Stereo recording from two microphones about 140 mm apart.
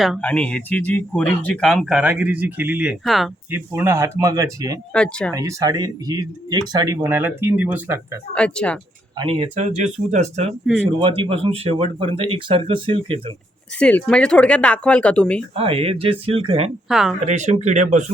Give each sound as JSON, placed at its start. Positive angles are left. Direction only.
{"t": 0.2, "sound": "speech", "side_deg": 10}
{"t": 3.5, "sound": "speech", "side_deg": -15}
{"t": 4.9, "sound": "speech", "side_deg": 5}
{"t": 5.3, "sound": "speech", "side_deg": -25}
{"t": 8.4, "sound": "speech", "side_deg": 10}
{"t": 9.1, "sound": "speech", "side_deg": -40}
{"t": 11.0, "sound": "speech", "side_deg": -40}
{"t": 13.7, "sound": "speech", "side_deg": 10}
{"t": 15.5, "sound": "speech", "side_deg": -45}
{"t": 16.9, "sound": "speech", "side_deg": -5}
{"t": 17.2, "sound": "speech", "side_deg": -55}